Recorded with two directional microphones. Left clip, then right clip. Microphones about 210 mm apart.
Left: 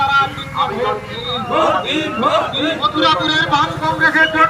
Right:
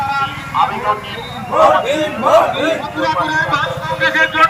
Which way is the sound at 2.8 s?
25° left (ahead or behind).